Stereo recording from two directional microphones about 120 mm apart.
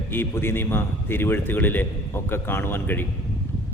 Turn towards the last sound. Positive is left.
turn(degrees=15)  # may be behind; listen again after turning